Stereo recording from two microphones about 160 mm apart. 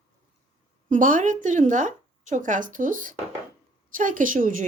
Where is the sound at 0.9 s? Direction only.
55° right (ahead or behind).